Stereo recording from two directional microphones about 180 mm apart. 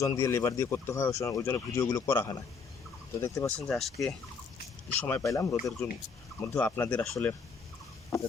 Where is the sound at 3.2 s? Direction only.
15° left (ahead or behind).